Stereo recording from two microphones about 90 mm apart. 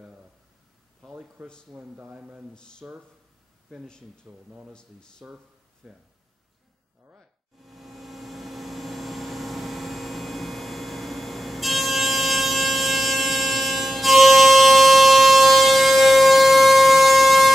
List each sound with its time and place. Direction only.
1.0 s a sound: 10° right (ahead or behind)
1.7 s speech: 10° right (ahead or behind)
3.8 s speech: 10° left (ahead or behind)
4.3 s speech: 20° right (ahead or behind)
7.6 s vehicle: centre (ahead or behind)